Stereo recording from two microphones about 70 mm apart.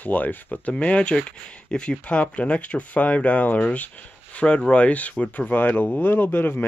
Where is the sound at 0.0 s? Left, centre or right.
Left.